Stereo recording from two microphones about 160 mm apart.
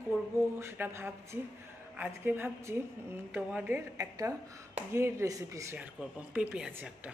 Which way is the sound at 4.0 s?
20° right (ahead or behind).